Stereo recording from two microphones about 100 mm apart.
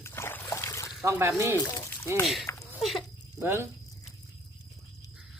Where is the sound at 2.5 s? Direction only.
25° left (ahead or behind).